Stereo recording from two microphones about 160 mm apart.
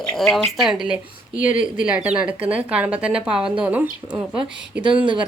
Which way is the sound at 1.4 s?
55° left (ahead or behind).